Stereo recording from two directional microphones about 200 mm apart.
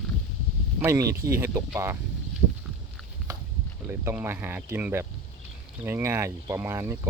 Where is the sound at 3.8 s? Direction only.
10° right (ahead or behind).